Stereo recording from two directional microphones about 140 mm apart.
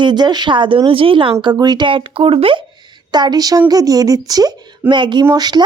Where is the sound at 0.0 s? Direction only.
30° right (ahead or behind).